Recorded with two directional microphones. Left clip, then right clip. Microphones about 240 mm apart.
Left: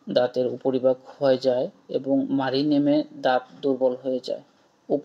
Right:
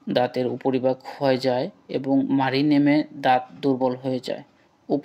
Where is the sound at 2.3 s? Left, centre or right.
Right.